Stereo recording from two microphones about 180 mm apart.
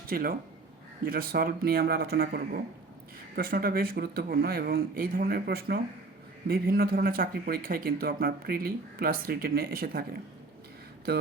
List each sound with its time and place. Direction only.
0.1 s speech: 50° right (ahead or behind)